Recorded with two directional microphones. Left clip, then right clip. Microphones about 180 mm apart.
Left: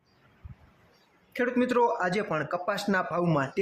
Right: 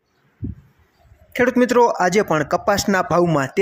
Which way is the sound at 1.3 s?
30° right (ahead or behind).